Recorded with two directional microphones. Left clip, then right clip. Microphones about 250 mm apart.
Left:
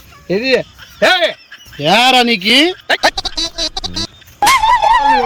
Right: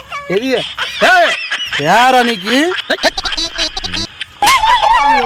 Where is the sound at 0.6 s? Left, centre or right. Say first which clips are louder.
Right 2 dB; right.